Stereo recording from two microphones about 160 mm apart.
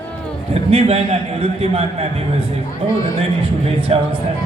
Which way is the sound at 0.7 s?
40° right (ahead or behind).